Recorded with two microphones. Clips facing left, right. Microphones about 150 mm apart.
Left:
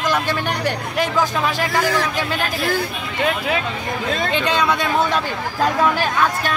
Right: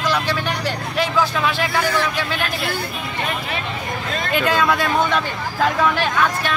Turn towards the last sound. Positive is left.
turn(degrees=20)  # may be behind; listen again after turning